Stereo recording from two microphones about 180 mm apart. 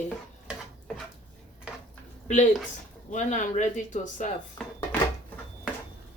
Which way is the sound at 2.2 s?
40° left (ahead or behind).